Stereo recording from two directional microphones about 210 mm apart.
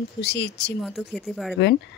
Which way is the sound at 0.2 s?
50° left (ahead or behind).